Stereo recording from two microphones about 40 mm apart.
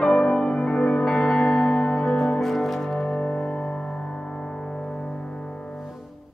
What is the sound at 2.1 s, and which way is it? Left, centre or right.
Music, centre.